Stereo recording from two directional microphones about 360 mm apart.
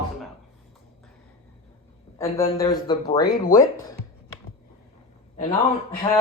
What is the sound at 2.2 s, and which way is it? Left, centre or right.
A man's voice, centre.